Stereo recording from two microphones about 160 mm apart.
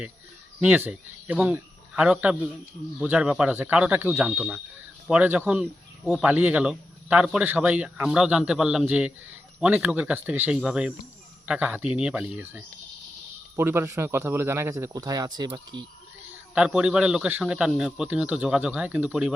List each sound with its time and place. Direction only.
0.6 s a man's voice: 10° right (ahead or behind); by 15.8 s 25° right (ahead or behind)
16.6 s a man's voice: 5° right (ahead or behind)